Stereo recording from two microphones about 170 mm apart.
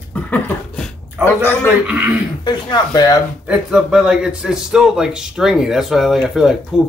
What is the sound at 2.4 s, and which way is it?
Speech, 25° left (ahead or behind).